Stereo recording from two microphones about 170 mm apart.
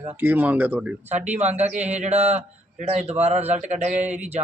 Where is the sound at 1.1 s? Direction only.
40° right (ahead or behind).